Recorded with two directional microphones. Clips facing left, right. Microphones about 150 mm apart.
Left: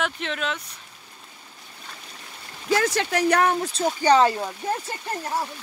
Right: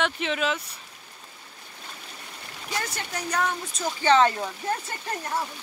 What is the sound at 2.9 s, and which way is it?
Speech, 85° left.